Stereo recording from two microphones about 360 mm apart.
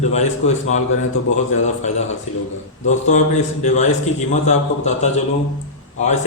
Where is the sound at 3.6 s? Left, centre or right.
Centre.